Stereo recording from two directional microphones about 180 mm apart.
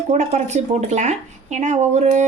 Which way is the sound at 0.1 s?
40° right (ahead or behind).